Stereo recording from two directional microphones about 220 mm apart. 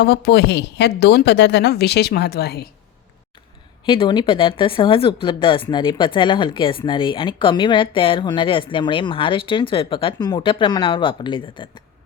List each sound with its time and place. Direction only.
0.0 s a woman's voice: 45° left (ahead or behind)
3.8 s speech: 20° left (ahead or behind)